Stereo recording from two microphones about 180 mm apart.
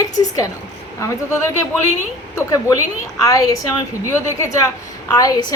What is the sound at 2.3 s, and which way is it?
A woman's voice, 20° left (ahead or behind).